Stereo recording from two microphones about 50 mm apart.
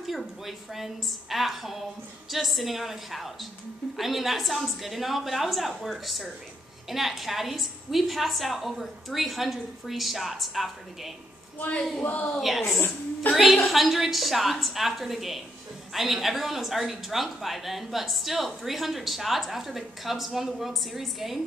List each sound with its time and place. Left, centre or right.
0.0 s speech: centre
12.0 s a woman's voice: left
12.4 s speech: centre
13.2 s a woman's voice: left
13.7 s speech: centre